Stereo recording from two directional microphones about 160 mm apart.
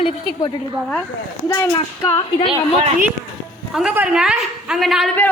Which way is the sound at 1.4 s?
20° left (ahead or behind).